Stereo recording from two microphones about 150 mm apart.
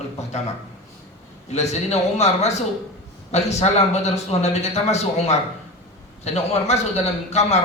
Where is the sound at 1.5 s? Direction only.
45° left (ahead or behind).